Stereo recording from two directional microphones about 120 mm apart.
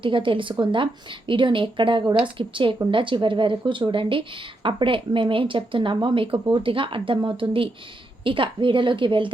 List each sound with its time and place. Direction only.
0.0 s speech: 45° right (ahead or behind)